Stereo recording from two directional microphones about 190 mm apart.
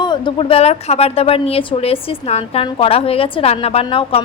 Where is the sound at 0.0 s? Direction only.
25° left (ahead or behind).